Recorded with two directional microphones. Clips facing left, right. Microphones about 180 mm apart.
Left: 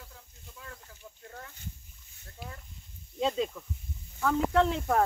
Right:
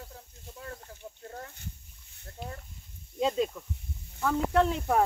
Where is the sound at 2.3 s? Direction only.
40° right (ahead or behind).